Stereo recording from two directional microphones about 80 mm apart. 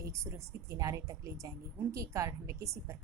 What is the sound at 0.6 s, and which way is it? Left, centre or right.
A woman's voice, right.